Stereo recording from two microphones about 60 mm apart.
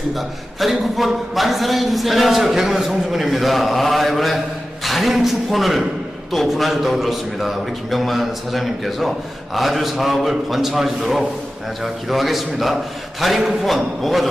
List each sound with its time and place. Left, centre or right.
0.1 s a man's voice: centre